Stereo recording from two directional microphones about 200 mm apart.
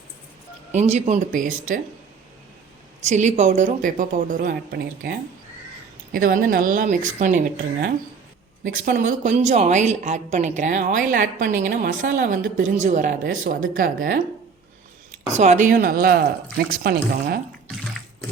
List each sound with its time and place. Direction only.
0.7 s a woman's voice: 35° right (ahead or behind)
3.0 s a woman's voice: 35° right (ahead or behind)
15.3 s speech: 35° right (ahead or behind)